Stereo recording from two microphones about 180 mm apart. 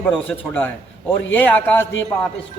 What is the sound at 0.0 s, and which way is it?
A man's voice, 10° left (ahead or behind).